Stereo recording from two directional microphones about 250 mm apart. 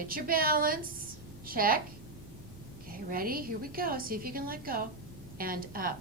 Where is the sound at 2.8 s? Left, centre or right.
Right.